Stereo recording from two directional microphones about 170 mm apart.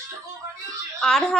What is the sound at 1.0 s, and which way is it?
Speech, centre (ahead or behind).